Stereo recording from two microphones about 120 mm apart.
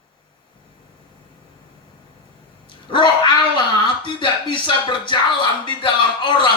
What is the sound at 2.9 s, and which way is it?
A man's voice, 40° left (ahead or behind).